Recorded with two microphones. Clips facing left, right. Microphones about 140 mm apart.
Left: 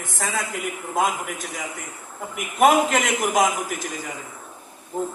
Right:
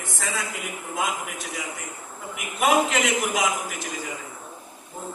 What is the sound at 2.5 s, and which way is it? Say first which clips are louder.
Speech: left 4 dB; 45° left (ahead or behind).